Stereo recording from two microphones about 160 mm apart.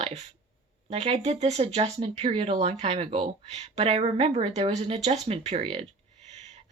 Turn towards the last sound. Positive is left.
turn(degrees=-35)  # may be behind; listen again after turning